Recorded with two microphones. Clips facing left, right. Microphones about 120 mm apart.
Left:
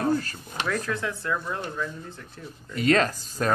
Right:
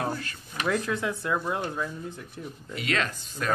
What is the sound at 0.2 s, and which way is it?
Drawer open or close, 35° left (ahead or behind).